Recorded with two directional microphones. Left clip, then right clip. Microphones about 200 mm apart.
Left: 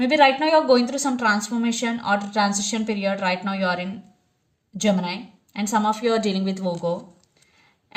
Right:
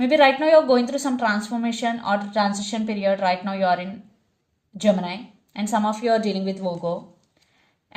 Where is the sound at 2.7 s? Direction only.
40° left (ahead or behind).